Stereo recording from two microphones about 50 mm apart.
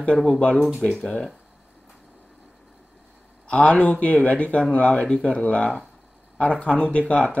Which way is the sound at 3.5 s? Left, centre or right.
Left.